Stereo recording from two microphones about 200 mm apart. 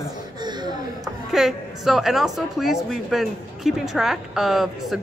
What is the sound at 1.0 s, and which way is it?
A woman's voice, centre (ahead or behind).